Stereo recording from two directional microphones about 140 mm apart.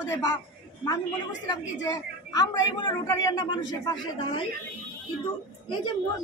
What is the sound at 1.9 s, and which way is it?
A man's voice, 30° left (ahead or behind).